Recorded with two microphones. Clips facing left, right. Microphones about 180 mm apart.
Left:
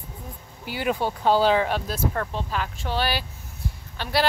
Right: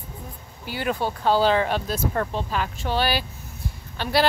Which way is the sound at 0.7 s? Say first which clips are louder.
Left 1 dB; 15° left (ahead or behind).